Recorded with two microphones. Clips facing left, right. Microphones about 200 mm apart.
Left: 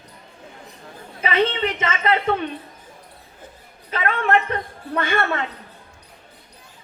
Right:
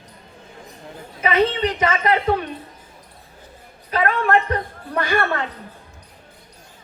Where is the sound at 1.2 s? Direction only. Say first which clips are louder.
Right 2 dB; 30° left (ahead or behind).